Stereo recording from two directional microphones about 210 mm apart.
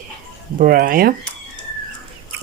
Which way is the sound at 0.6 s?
45° right (ahead or behind).